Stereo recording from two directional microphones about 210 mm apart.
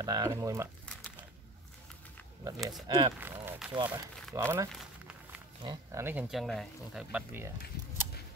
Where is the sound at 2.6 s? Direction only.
Centre (ahead or behind).